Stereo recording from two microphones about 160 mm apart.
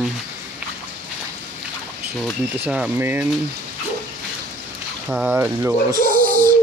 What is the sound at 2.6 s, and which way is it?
Speech, 10° right (ahead or behind).